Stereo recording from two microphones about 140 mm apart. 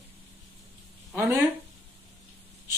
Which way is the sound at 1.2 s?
15° right (ahead or behind).